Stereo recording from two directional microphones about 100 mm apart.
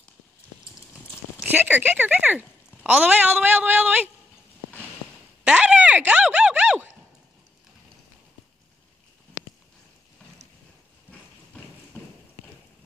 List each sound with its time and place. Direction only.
1.6 s a woman's voice: 15° right (ahead or behind)
5.4 s a sound: 10° right (ahead or behind)
11.1 s clip-clop: 15° left (ahead or behind)